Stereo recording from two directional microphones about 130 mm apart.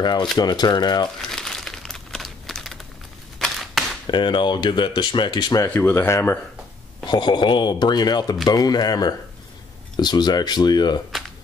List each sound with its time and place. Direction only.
0.4 s speech: 35° left (ahead or behind)
1.3 s crumpling: 5° left (ahead or behind)
3.3 s a sound: centre (ahead or behind)
4.1 s speech: 35° left (ahead or behind)
5.8 s speech: 15° left (ahead or behind)
7.1 s speech: 35° left (ahead or behind)